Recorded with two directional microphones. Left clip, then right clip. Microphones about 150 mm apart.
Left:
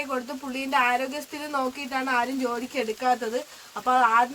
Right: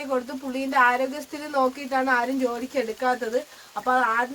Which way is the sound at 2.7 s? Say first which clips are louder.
Left 2 dB; 15° left (ahead or behind).